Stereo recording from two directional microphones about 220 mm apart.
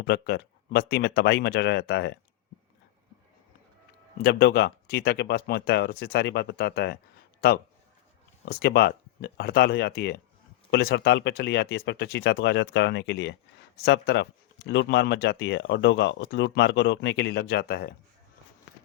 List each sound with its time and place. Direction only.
0.0 s speech: 45° left (ahead or behind)
4.2 s speech: 45° left (ahead or behind)